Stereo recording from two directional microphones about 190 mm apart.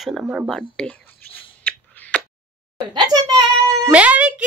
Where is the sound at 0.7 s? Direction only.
5° left (ahead or behind).